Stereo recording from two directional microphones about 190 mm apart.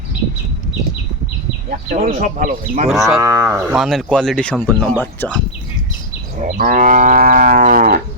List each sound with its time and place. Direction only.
1.7 s cattle: 45° right (ahead or behind)
2.9 s speech: centre (ahead or behind)
3.2 s livestock: 15° right (ahead or behind)
3.8 s speech: centre (ahead or behind)
6.4 s cattle: 45° right (ahead or behind)